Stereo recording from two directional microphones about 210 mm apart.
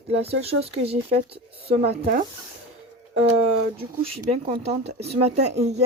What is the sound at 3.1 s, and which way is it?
Speech, 30° right (ahead or behind).